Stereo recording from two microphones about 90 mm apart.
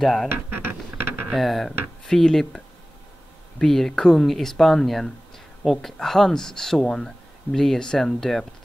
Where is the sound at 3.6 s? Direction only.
5° left (ahead or behind).